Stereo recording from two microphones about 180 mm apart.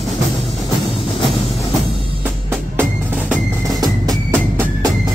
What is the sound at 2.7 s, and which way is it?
Music, 10° right (ahead or behind).